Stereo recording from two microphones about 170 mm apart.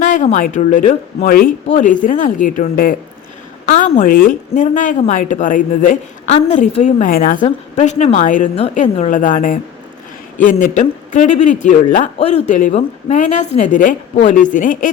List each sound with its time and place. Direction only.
0.0 s a man's voice: 45° left (ahead or behind)
1.6 s a man's voice: 45° left (ahead or behind)
7.4 s a man's voice: 40° left (ahead or behind)